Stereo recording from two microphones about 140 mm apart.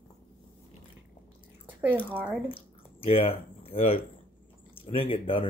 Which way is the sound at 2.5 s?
40° left (ahead or behind).